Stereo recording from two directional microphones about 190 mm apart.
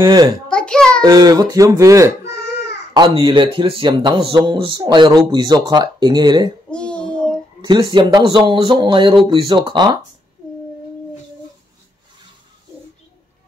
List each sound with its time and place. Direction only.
0.0 s speech: 20° right (ahead or behind)
0.5 s a sound: 5° left (ahead or behind)
1.0 s speech: 20° right (ahead or behind)
2.2 s baby cry: 60° left (ahead or behind)
2.9 s speech: 25° right (ahead or behind)
6.7 s child singing: 5° left (ahead or behind)
7.6 s speech: 25° right (ahead or behind)